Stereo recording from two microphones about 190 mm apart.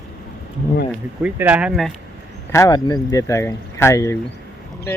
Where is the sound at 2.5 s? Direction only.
15° left (ahead or behind).